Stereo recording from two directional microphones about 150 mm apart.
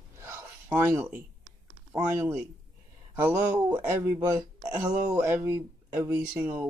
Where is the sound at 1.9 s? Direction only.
15° right (ahead or behind).